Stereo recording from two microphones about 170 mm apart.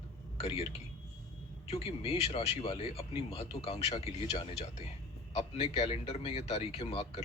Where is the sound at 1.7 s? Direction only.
35° left (ahead or behind).